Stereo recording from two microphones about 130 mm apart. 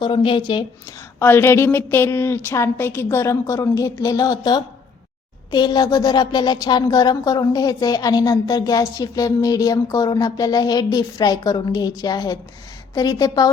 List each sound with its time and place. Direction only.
0.0 s speech: 40° left (ahead or behind)
1.2 s a woman's voice: 15° left (ahead or behind)